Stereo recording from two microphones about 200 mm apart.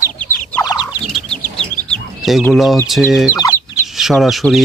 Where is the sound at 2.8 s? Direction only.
Centre (ahead or behind).